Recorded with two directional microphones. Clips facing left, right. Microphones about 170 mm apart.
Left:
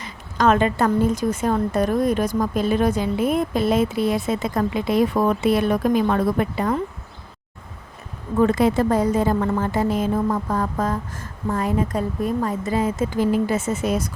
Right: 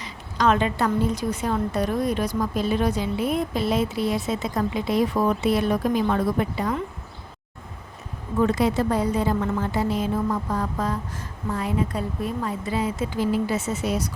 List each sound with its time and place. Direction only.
0.0 s a woman's voice: 50° left (ahead or behind)
8.4 s a woman's voice: 50° left (ahead or behind)